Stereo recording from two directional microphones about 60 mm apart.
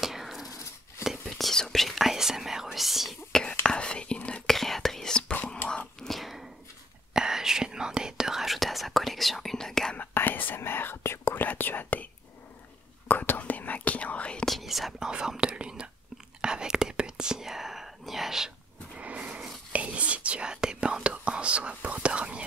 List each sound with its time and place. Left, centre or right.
0.0 s a sound: centre
1.0 s whispering: centre
3.3 s whispering: centre
4.5 s whispering: centre
5.6 s a sound: left
5.9 s throat clearing: centre
7.2 s whispering: centre
9.9 s whispering: left
11.4 s whispering: left
13.1 s whispering: left
14.4 s whispering: centre
15.0 s whispering: centre
18.9 s a sound: right
19.7 s whispering: right